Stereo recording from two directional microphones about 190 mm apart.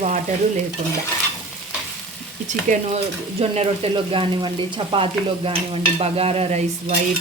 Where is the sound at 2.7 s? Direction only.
40° right (ahead or behind).